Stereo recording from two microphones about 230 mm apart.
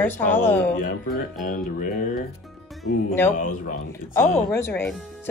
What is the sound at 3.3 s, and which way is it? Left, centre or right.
Speech, left.